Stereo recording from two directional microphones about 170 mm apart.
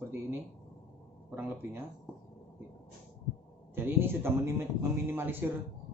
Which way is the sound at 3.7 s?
15° right (ahead or behind).